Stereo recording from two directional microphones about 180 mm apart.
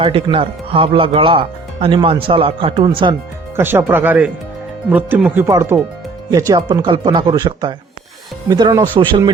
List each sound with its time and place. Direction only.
0.0 s speech: 30° right (ahead or behind)
3.5 s speech: 10° right (ahead or behind)